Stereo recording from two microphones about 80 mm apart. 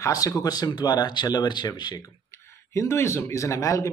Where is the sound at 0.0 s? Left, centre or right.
Left.